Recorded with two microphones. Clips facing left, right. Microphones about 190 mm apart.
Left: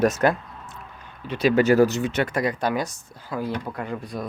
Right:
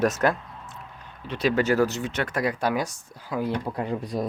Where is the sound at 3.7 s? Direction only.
30° right (ahead or behind).